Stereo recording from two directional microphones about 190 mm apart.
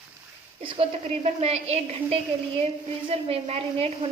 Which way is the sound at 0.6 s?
30° right (ahead or behind).